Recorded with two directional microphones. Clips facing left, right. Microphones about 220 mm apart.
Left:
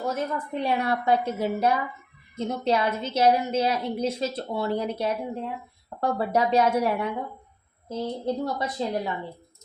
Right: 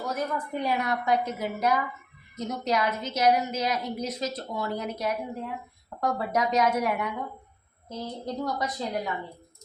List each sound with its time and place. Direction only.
0.0 s a woman's voice: 25° left (ahead or behind)